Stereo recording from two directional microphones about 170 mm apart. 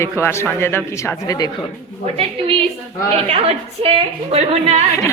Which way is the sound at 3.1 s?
35° right (ahead or behind).